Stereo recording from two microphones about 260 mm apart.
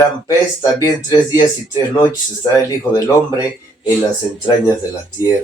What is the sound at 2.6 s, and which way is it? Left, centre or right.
Speech, centre.